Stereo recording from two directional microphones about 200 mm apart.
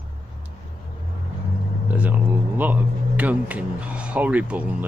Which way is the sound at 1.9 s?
10° right (ahead or behind).